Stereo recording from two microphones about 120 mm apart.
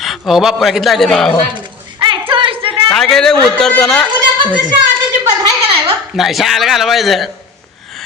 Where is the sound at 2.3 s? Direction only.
45° right (ahead or behind).